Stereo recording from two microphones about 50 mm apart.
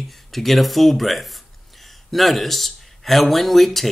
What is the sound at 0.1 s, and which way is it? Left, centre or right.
Speech, centre.